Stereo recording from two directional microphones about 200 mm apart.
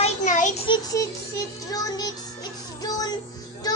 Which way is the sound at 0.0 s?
40° left (ahead or behind).